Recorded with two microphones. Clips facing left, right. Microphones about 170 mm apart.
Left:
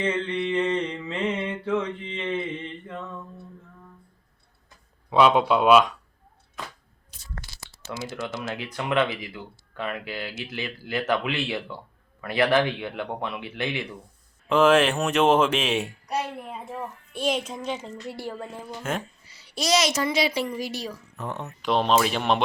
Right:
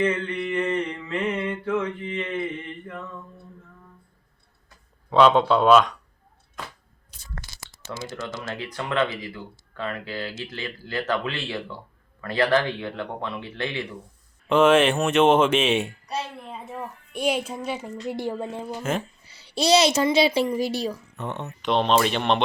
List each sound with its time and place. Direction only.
0.0 s mantra: 25° left (ahead or behind)
5.1 s speech: 10° left (ahead or behind)
8.1 s speech: 15° left (ahead or behind)
14.5 s speech: 5° right (ahead or behind)
16.0 s a woman's voice: 10° left (ahead or behind)
17.1 s a child's voice: 10° right (ahead or behind)
18.8 s speech: 5° right (ahead or behind)
19.3 s a child's voice: 30° right (ahead or behind)
21.2 s speech: centre (ahead or behind)